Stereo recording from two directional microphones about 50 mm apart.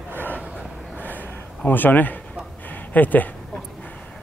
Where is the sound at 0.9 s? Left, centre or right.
Left.